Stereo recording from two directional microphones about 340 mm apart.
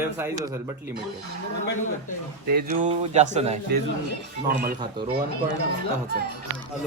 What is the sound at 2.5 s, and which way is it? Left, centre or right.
Speech, right.